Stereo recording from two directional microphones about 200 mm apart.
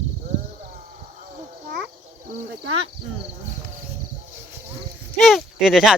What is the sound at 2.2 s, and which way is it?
Cricket, 40° right (ahead or behind).